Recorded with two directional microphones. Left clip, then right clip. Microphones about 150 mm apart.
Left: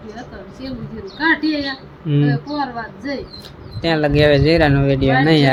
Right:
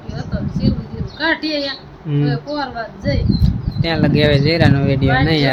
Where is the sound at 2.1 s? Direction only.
10° left (ahead or behind).